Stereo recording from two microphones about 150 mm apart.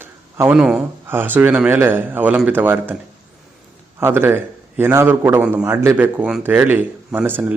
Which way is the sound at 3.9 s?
15° right (ahead or behind).